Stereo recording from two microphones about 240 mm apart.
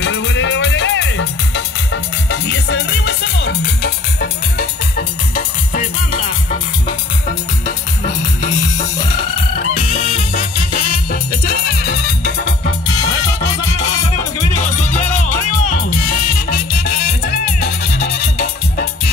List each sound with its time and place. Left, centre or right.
0.0 s music: left
10.3 s music: left
14.1 s music: left